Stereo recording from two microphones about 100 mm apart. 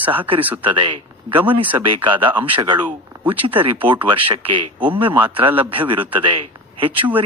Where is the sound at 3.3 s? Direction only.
65° right (ahead or behind).